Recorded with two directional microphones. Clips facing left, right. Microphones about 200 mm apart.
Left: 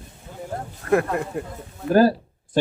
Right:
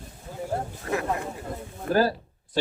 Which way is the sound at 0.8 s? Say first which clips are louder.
Left 9 dB; 55° left (ahead or behind).